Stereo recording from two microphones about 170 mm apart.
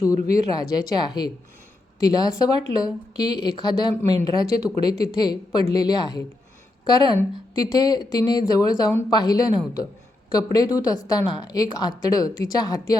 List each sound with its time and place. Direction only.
0.1 s a woman's voice: 20° left (ahead or behind)